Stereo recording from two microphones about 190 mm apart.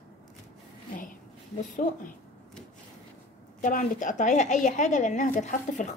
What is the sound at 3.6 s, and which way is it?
A woman's voice, 40° left (ahead or behind).